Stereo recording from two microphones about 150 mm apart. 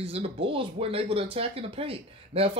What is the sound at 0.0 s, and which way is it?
Speech, 40° right (ahead or behind).